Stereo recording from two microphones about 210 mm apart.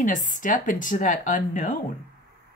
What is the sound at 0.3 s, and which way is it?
Speech, 40° left (ahead or behind).